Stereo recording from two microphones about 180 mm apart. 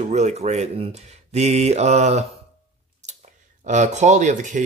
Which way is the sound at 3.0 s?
40° right (ahead or behind).